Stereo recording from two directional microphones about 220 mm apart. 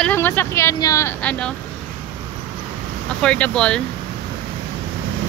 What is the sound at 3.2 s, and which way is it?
Speech, 5° left (ahead or behind).